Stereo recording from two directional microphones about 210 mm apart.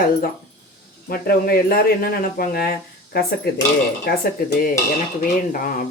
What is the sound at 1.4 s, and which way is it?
Speech, 45° left (ahead or behind).